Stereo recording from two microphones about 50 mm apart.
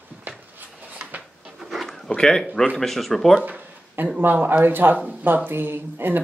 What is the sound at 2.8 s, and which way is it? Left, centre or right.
Speech, centre.